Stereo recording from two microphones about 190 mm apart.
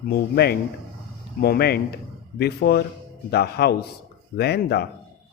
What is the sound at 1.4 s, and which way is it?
Speech, 55° left (ahead or behind).